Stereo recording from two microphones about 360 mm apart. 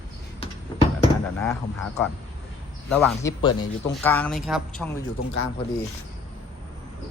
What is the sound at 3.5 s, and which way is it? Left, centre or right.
Speech, left.